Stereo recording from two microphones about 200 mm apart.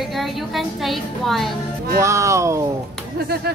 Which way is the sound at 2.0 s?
15° right (ahead or behind).